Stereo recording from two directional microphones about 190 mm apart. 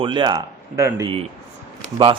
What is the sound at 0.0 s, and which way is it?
A man's voice, 25° right (ahead or behind).